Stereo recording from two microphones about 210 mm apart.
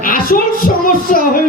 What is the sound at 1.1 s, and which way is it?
Speech, 40° left (ahead or behind).